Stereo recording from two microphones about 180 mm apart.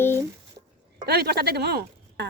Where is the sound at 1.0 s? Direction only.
65° right (ahead or behind).